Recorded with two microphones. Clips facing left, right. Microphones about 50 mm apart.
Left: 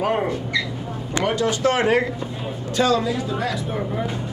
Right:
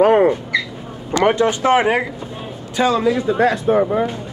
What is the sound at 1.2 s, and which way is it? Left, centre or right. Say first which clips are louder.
Speech: right 5 dB; right.